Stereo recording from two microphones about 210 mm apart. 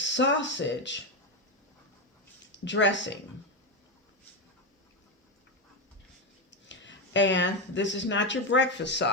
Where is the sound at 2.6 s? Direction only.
60° left (ahead or behind).